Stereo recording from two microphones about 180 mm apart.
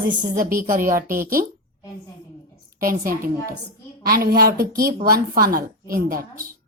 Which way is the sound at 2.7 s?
50° right (ahead or behind).